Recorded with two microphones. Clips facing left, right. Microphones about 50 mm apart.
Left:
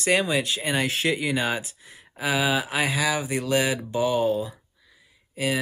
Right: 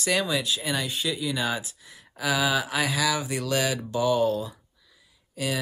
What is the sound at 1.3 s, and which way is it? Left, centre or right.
Speech, left.